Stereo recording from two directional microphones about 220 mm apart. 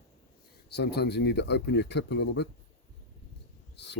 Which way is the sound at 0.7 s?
45° left (ahead or behind).